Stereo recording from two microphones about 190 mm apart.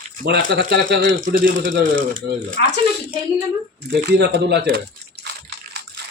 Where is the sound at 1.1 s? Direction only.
80° right.